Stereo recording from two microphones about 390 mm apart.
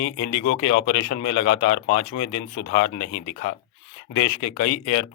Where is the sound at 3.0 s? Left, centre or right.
Left.